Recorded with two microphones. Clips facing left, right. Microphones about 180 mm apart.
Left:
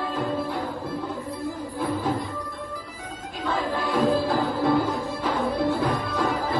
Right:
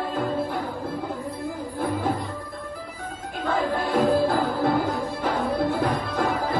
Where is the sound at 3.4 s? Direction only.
60° right (ahead or behind).